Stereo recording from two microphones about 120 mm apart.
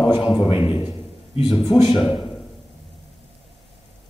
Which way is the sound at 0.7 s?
50° left (ahead or behind).